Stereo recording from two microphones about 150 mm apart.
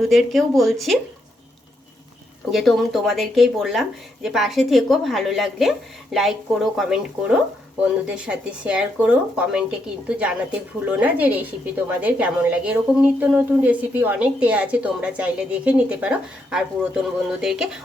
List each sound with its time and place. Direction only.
0.0 s speech: centre (ahead or behind)
2.5 s a woman's voice: centre (ahead or behind)